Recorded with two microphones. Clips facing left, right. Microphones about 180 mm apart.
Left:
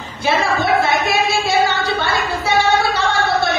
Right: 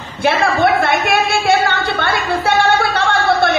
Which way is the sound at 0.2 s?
60° right (ahead or behind).